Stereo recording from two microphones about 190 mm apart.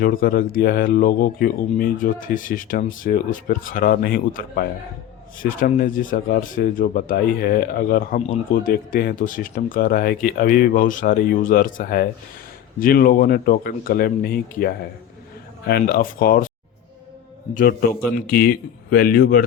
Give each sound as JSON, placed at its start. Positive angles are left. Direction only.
{"t": 0.0, "sound": "speech", "side_deg": 50}
{"t": 17.5, "sound": "speech", "side_deg": 45}